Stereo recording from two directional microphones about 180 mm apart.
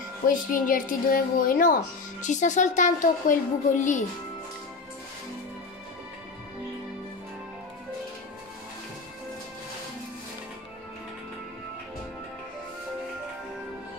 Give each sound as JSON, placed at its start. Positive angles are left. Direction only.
{"t": 0.3, "sound": "a child's voice", "side_deg": 50}